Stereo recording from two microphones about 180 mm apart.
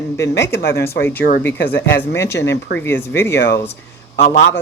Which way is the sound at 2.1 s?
15° left (ahead or behind).